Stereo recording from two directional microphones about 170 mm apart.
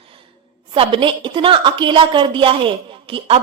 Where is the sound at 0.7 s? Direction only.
30° right (ahead or behind).